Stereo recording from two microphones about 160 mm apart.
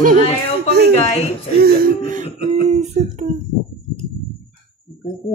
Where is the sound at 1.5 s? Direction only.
70° right (ahead or behind); by 2.3 s 55° right (ahead or behind).